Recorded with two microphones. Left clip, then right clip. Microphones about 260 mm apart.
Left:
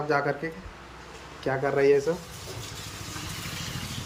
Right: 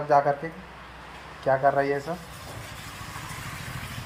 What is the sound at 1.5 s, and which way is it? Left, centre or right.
Speech, centre.